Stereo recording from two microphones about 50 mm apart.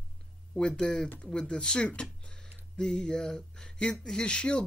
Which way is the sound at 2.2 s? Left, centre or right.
Centre.